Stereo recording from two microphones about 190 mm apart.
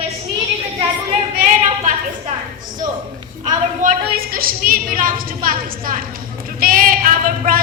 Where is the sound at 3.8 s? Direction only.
50° right (ahead or behind).